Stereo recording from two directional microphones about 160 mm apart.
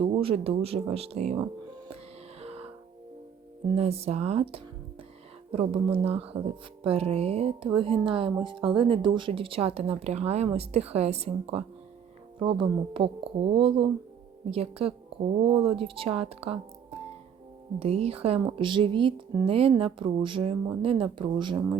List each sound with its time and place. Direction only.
0.0 s speech: 35° right (ahead or behind)
2.4 s music: 40° right (ahead or behind)
3.7 s speech: 40° right (ahead or behind)
17.7 s speech: 40° right (ahead or behind)